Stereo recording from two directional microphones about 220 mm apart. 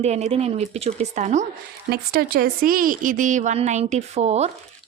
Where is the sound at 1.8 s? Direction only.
45° right (ahead or behind).